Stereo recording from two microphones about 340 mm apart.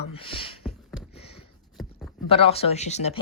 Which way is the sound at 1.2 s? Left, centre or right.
Centre.